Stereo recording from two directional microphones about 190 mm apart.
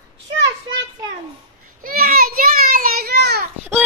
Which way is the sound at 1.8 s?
50° right (ahead or behind).